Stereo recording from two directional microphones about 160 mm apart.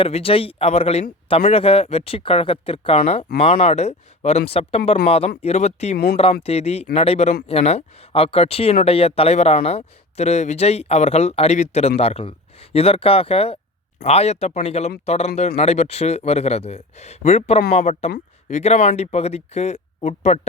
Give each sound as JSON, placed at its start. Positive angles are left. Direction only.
{"t": 0.0, "sound": "a man's voice", "side_deg": 35}